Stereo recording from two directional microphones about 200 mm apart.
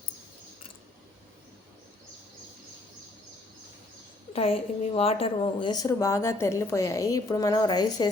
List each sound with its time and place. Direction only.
4.4 s a woman's voice: 30° left (ahead or behind)